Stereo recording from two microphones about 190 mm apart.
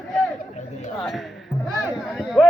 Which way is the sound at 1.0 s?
Centre (ahead or behind).